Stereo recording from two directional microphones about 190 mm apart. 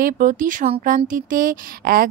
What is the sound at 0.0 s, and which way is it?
A woman's voice, 45° right (ahead or behind).